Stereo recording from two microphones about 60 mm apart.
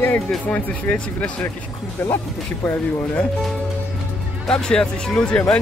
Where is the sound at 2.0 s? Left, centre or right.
Left.